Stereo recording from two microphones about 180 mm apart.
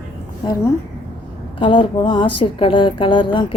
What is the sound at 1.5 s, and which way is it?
Speech, 25° left (ahead or behind).